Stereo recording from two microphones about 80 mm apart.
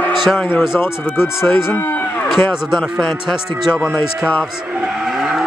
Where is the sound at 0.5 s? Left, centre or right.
Left.